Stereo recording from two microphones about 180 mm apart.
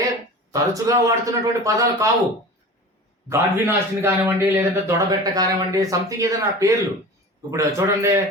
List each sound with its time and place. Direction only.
0.5 s a man's voice: 20° right (ahead or behind)
3.2 s a man's voice: 15° right (ahead or behind)